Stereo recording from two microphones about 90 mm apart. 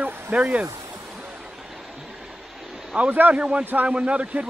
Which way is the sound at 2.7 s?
10° right (ahead or behind).